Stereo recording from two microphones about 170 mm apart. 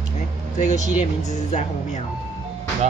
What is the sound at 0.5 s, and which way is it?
Speech, 45° left (ahead or behind).